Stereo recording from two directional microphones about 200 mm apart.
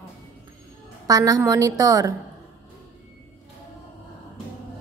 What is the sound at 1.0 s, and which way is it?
A woman's voice, 20° right (ahead or behind).